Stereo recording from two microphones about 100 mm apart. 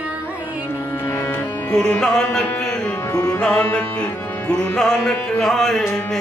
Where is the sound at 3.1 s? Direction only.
35° left (ahead or behind).